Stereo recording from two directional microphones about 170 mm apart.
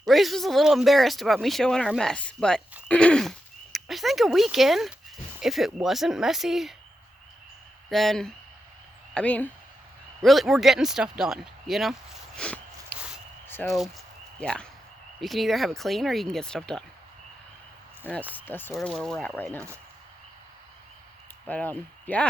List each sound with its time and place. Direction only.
0.1 s speech: centre (ahead or behind)
7.9 s speech: centre (ahead or behind)
12.4 s a sound: 5° left (ahead or behind)
13.7 s speech: centre (ahead or behind)
18.3 s speech: 10° left (ahead or behind)
19.5 s speech: 15° right (ahead or behind)
21.4 s speech: 10° left (ahead or behind)